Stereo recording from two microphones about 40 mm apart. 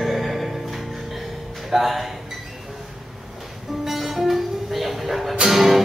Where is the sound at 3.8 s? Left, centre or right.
Centre.